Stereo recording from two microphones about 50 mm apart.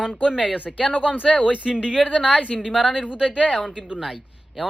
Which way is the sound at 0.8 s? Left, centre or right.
Left.